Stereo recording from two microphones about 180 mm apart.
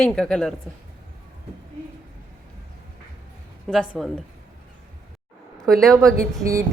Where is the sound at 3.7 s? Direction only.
Centre (ahead or behind).